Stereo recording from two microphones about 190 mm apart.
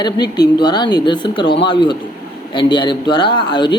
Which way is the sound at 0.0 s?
20° left (ahead or behind).